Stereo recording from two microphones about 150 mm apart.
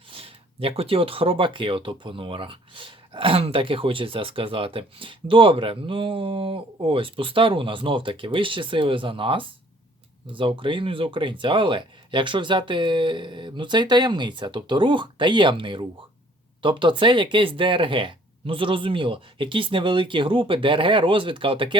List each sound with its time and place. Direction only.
0.1 s speech: 40° right (ahead or behind)